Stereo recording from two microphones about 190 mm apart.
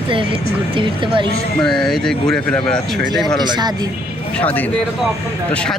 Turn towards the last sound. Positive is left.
turn(degrees=5)  # may be behind; listen again after turning